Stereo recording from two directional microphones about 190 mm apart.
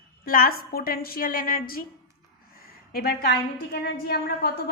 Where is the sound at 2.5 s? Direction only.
50° left (ahead or behind).